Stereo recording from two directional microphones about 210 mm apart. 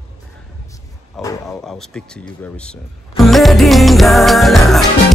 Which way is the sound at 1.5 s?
Centre (ahead or behind).